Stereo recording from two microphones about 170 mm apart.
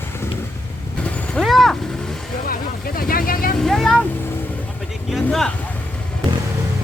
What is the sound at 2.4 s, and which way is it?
Vehicle, 60° left (ahead or behind).